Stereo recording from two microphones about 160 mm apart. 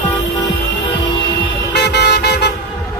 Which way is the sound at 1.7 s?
90° left.